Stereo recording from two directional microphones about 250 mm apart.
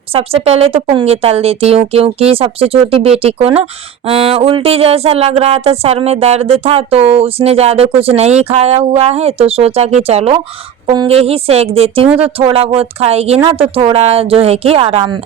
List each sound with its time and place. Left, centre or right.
0.1 s speech: right